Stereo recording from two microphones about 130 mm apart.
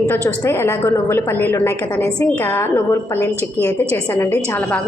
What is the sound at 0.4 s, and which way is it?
A woman's voice, 20° left (ahead or behind).